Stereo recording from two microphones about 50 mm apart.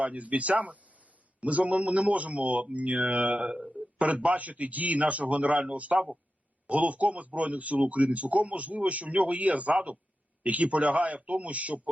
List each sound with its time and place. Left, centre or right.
0.0 s a man's voice: right